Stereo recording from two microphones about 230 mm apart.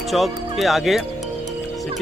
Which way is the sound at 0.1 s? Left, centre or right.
Centre.